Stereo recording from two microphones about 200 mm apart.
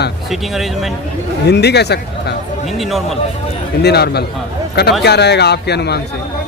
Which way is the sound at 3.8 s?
55° left (ahead or behind).